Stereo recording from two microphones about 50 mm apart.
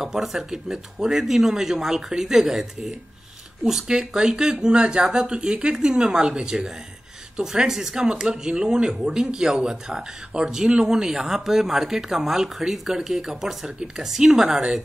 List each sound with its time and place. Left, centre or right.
0.0 s speech: centre